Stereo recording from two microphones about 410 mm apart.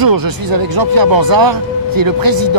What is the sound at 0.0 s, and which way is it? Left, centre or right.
Speech, right.